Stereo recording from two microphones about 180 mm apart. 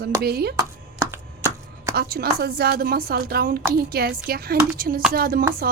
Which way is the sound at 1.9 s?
60° right (ahead or behind).